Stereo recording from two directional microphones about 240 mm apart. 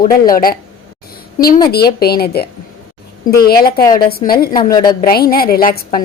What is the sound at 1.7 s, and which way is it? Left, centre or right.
Speech, left.